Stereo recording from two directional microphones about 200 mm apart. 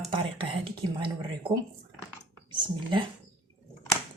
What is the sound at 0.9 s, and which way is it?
Speech, 20° right (ahead or behind).